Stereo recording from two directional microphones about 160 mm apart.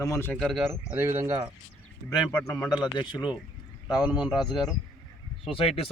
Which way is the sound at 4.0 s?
5° right (ahead or behind).